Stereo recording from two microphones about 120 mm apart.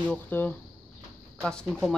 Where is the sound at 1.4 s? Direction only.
5° left (ahead or behind).